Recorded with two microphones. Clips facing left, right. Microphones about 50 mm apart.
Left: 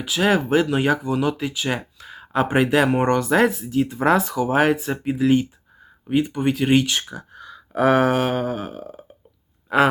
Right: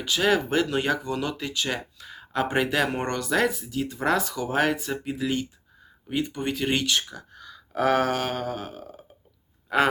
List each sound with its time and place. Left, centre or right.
0.0 s speech: centre